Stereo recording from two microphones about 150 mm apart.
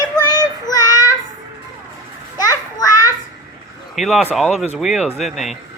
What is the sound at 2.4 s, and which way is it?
Children playing, 25° left (ahead or behind).